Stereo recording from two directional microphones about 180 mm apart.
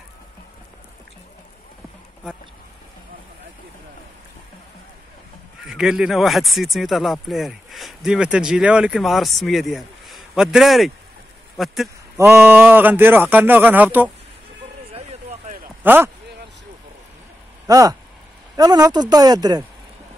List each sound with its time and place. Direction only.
5.6 s speech: centre (ahead or behind)
12.2 s speech: 15° right (ahead or behind)
14.9 s a sound: 35° right (ahead or behind)
15.8 s speech: 10° right (ahead or behind)
17.6 s speech: 20° right (ahead or behind)